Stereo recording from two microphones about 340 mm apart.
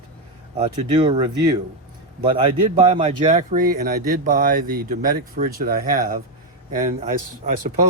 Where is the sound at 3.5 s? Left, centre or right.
Right.